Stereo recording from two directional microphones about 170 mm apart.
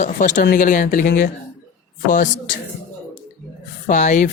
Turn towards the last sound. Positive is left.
turn(degrees=45)  # may be behind; listen again after turning